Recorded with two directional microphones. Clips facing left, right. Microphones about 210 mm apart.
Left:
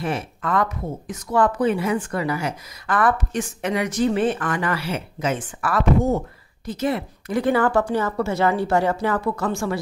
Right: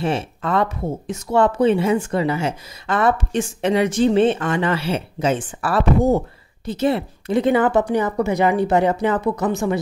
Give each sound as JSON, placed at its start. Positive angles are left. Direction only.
{"t": 0.0, "sound": "speech", "side_deg": -25}